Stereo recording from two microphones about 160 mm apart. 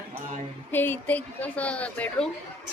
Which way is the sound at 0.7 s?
10° left (ahead or behind).